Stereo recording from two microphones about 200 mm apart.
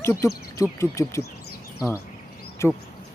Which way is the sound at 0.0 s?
15° left (ahead or behind).